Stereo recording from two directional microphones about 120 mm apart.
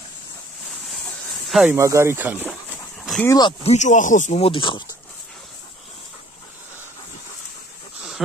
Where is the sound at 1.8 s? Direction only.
25° right (ahead or behind).